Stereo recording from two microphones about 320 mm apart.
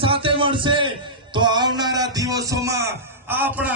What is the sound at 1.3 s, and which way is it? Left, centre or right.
A man's voice, centre.